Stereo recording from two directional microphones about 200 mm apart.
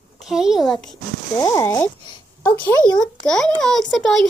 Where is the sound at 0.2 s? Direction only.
Centre (ahead or behind).